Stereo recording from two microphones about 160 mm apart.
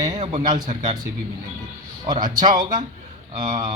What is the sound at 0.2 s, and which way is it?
Speech, 45° right (ahead or behind).